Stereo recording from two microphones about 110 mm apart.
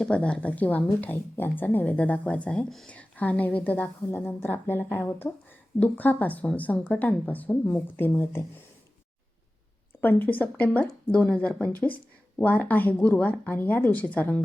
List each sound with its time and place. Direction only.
0.0 s speech: 10° left (ahead or behind)
10.0 s speech: 15° left (ahead or behind)